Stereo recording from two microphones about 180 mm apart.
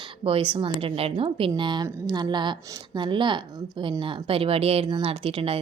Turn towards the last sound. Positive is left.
turn(degrees=-30)  # may be behind; listen again after turning